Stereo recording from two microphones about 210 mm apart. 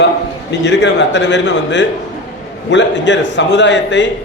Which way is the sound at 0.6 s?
55° left (ahead or behind).